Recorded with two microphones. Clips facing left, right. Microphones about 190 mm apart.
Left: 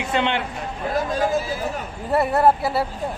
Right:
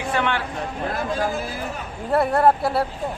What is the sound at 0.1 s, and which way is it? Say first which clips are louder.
Speech: left 1 dB; 25° left (ahead or behind).